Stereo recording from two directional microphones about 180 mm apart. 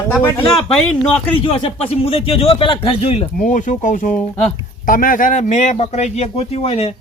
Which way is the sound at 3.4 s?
45° left (ahead or behind).